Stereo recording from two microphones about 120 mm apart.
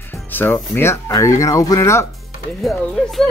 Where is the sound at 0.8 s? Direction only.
25° left (ahead or behind).